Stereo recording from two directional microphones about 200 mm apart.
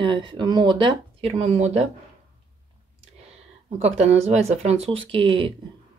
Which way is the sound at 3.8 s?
30° right (ahead or behind).